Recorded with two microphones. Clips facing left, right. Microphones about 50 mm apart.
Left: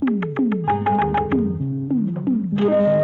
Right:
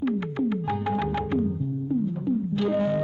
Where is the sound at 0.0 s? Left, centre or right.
Left.